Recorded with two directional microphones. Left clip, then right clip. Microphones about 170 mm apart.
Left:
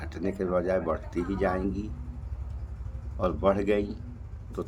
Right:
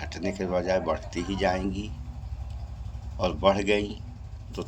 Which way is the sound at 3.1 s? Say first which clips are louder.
Right 2 dB; 20° left (ahead or behind).